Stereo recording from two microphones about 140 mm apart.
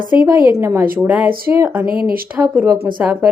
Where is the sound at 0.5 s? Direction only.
20° right (ahead or behind).